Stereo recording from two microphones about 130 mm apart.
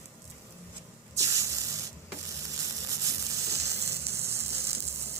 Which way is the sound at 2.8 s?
25° right (ahead or behind).